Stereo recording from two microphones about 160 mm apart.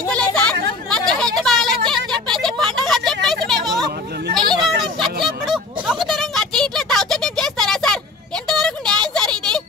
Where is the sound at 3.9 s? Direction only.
80° right.